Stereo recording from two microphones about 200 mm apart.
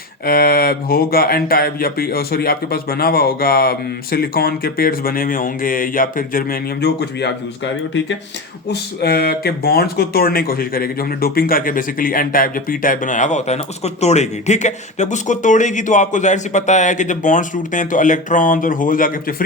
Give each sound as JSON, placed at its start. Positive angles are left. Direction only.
{"t": 0.3, "sound": "speech", "side_deg": 45}